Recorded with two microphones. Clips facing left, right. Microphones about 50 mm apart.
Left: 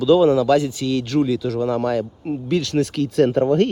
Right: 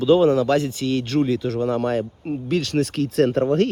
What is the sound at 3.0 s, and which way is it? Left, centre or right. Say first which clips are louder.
Speech: left 1 dB; left.